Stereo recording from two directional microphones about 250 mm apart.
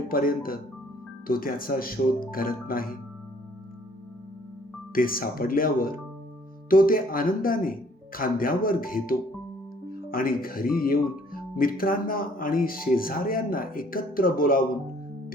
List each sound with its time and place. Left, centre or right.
0.1 s speech: left
4.9 s speech: left